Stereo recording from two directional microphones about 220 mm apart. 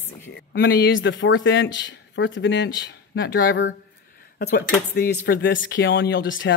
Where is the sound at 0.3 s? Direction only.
50° left (ahead or behind).